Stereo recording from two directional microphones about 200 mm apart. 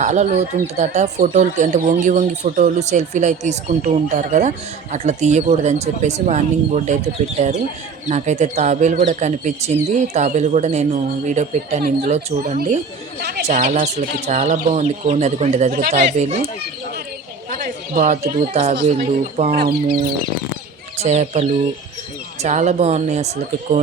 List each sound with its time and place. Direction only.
0.0 s speech: 35° right (ahead or behind)
12.4 s speech: 45° right (ahead or behind)
17.9 s speech: 45° right (ahead or behind)
19.5 s speech: 50° right (ahead or behind)
21.0 s speech: 35° right (ahead or behind)